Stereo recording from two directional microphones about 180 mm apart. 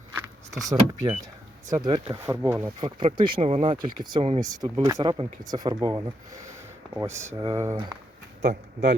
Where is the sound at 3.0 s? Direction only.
25° right (ahead or behind).